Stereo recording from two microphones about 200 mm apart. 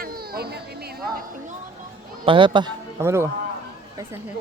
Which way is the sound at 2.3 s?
25° right (ahead or behind).